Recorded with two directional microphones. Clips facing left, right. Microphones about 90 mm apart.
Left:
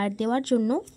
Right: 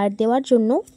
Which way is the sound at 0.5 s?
35° right (ahead or behind).